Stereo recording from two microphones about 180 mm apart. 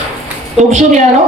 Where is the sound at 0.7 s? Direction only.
45° right (ahead or behind).